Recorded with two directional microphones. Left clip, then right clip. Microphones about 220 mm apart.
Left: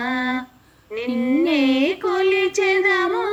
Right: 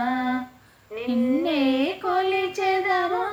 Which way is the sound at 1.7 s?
45° left (ahead or behind).